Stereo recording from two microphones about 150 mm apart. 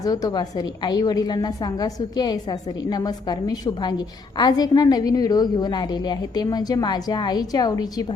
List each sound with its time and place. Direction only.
0.0 s a woman's voice: 25° left (ahead or behind)